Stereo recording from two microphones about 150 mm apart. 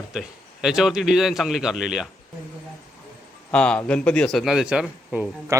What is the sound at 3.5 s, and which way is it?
Speech, 5° left (ahead or behind).